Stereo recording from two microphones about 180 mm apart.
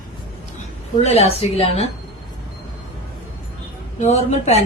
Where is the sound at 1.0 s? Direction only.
35° left (ahead or behind).